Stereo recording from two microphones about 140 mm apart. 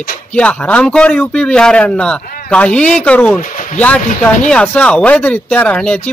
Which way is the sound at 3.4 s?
65° left (ahead or behind).